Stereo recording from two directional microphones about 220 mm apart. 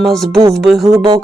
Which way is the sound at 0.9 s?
25° right (ahead or behind).